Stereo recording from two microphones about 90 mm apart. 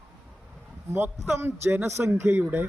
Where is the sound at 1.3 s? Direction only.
30° right (ahead or behind).